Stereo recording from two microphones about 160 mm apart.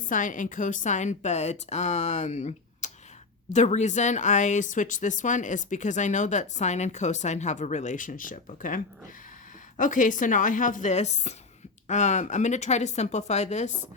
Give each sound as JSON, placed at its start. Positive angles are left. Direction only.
{"t": 0.0, "sound": "speech", "side_deg": 55}